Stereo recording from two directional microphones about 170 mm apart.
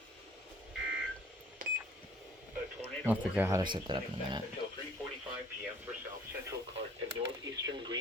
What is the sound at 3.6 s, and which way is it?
Speech, 25° right (ahead or behind).